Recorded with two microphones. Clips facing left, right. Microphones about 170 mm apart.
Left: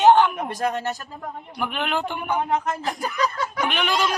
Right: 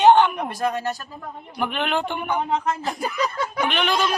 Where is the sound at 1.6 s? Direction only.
5° left (ahead or behind).